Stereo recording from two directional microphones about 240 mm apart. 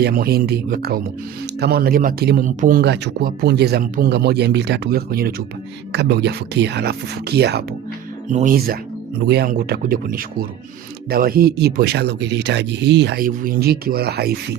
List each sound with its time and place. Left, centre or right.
0.0 s a man's voice: right
8.3 s a man's voice: right